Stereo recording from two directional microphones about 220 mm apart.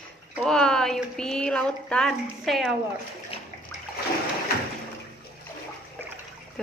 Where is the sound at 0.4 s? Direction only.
5° left (ahead or behind).